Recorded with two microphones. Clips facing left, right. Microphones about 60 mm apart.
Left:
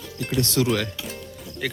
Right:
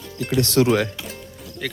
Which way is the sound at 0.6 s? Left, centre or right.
Right.